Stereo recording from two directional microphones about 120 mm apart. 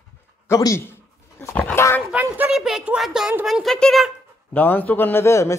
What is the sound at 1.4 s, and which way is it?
Dog, 15° left (ahead or behind).